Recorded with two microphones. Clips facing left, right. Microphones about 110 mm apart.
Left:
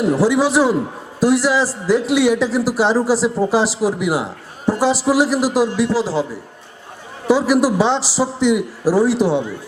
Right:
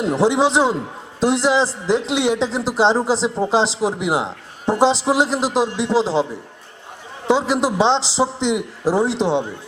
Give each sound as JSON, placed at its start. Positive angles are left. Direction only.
{"t": 0.0, "sound": "speech", "side_deg": -20}
{"t": 7.3, "sound": "speech", "side_deg": -20}